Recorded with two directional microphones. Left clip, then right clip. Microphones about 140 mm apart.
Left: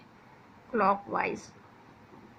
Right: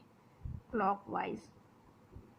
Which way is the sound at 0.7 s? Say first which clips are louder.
Left 7 dB; 50° right (ahead or behind).